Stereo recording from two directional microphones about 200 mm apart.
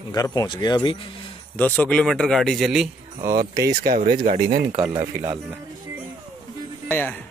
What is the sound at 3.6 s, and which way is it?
Speech, 45° right (ahead or behind).